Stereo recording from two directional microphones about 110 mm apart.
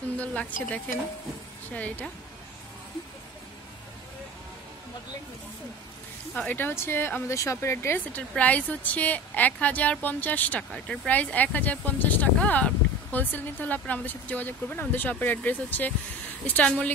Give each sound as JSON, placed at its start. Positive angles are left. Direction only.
{"t": 0.2, "sound": "a woman's voice", "side_deg": 10}
{"t": 6.3, "sound": "a woman's voice", "side_deg": 15}